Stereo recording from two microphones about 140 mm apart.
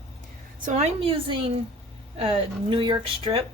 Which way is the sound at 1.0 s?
40° right (ahead or behind).